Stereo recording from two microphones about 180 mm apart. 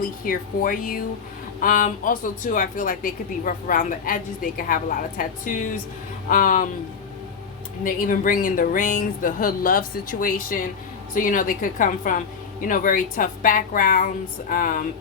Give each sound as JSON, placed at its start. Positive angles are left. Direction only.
{"t": 0.3, "sound": "a woman's voice", "side_deg": 50}
{"t": 7.9, "sound": "a woman's voice", "side_deg": 50}